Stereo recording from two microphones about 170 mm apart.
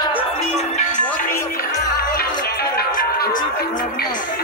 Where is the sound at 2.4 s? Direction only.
65° left (ahead or behind).